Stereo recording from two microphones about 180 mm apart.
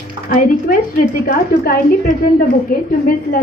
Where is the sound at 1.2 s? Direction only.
55° left (ahead or behind).